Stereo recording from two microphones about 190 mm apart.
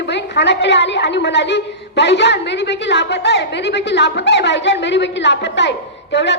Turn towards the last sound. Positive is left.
turn(degrees=65)  # may be behind; listen again after turning